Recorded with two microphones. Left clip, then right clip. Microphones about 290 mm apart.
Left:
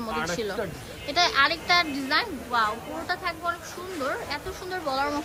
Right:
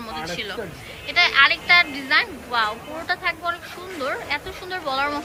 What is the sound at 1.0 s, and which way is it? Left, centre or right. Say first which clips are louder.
A woman's voice: right 6 dB; centre.